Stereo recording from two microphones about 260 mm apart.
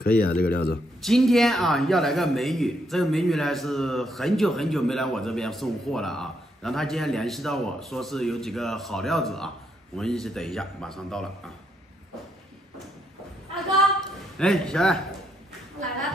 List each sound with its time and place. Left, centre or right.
0.0 s speech: left
1.0 s a man's voice: centre
14.4 s a man's voice: centre